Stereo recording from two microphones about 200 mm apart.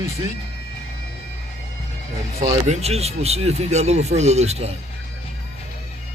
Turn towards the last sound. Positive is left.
turn(degrees=-30)  # may be behind; listen again after turning